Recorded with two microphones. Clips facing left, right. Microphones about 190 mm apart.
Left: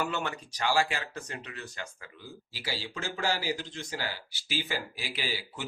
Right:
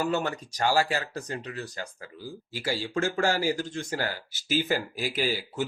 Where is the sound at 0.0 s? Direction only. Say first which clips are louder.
Right 5 dB; 40° right (ahead or behind).